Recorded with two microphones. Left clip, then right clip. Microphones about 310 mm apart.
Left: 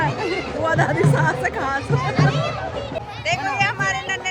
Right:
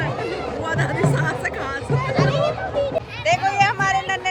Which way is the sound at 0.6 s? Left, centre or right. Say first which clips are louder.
Left 6 dB; centre.